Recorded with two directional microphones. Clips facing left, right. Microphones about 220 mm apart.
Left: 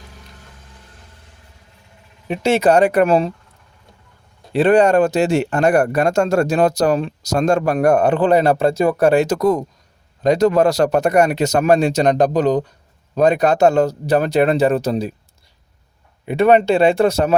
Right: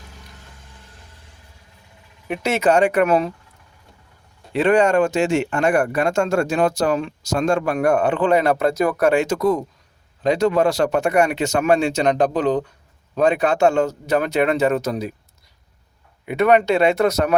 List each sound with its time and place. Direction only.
2.2 s speech: 25° left (ahead or behind)
4.5 s speech: 35° left (ahead or behind)
16.2 s speech: 30° left (ahead or behind)